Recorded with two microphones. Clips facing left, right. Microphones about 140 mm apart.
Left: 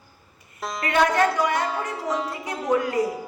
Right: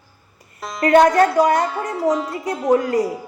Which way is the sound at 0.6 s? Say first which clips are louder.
Right 6 dB; centre (ahead or behind).